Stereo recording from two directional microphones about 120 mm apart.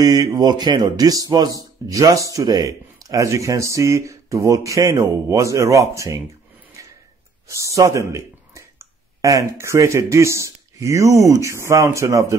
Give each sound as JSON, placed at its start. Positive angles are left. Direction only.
{"t": 0.0, "sound": "speech", "side_deg": -30}
{"t": 6.8, "sound": "tick-tock", "side_deg": -25}
{"t": 7.4, "sound": "speech", "side_deg": -25}